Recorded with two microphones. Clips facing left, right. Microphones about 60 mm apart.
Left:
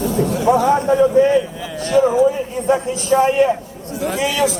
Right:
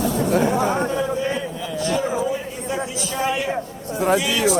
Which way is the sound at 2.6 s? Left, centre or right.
Left.